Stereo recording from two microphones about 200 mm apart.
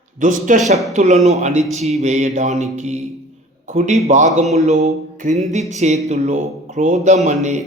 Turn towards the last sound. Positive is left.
turn(degrees=-35)  # may be behind; listen again after turning